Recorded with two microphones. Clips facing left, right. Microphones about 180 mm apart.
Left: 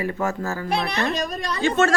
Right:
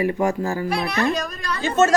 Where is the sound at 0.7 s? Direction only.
Centre (ahead or behind).